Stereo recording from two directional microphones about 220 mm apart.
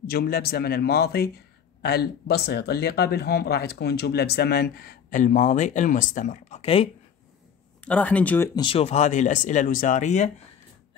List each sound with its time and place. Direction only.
0.0 s a man's voice: 45° left (ahead or behind); by 6.9 s 25° left (ahead or behind)
7.8 s speech: 5° left (ahead or behind)
8.5 s speech: 25° left (ahead or behind)